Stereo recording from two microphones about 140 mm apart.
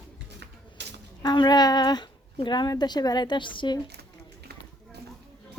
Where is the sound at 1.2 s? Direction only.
30° left (ahead or behind).